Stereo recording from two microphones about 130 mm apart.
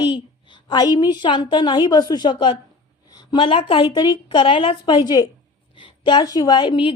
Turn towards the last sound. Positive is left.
turn(degrees=40)  # may be behind; listen again after turning